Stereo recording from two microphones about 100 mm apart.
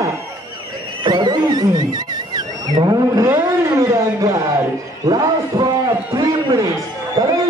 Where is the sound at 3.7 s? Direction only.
35° right (ahead or behind).